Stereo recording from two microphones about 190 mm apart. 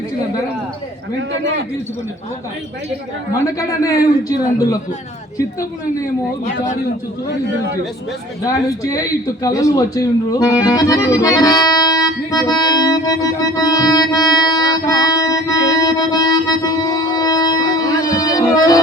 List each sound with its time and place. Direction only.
3.4 s a man's voice: 20° left (ahead or behind)
8.4 s a man's voice: 20° left (ahead or behind)